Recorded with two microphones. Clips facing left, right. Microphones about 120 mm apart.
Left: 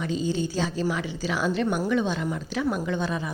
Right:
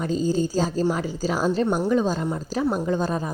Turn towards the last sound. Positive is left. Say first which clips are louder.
# right 4 dB
turn(degrees=-40)  # may be behind; listen again after turning